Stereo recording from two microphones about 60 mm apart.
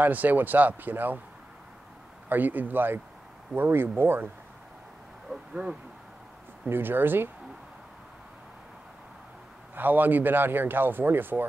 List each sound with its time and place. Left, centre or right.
0.0 s speech: right
2.2 s speech: right
5.5 s speech: centre
6.7 s speech: right
9.8 s speech: right